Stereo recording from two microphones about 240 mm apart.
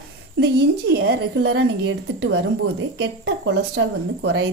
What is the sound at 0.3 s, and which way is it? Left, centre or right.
Speech, right.